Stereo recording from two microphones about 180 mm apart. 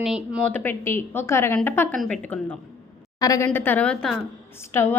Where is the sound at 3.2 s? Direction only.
20° left (ahead or behind).